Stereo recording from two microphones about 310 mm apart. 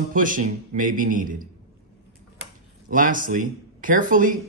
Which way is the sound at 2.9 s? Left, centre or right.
Right.